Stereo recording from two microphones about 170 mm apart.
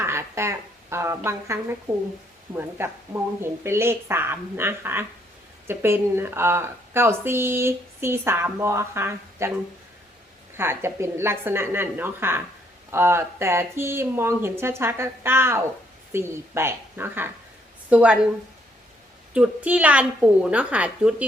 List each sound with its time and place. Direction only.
0.0 s a woman's voice: 15° right (ahead or behind)
10.6 s a woman's voice: 15° right (ahead or behind)
19.3 s a woman's voice: 10° right (ahead or behind)